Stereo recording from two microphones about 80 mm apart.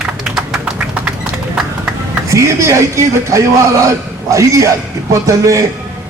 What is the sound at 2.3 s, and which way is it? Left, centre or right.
A man's voice, right.